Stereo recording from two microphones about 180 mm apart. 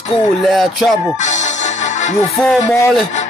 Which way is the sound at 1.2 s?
40° left (ahead or behind).